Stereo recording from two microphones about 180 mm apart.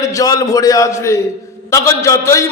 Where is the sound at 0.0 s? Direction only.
20° left (ahead or behind).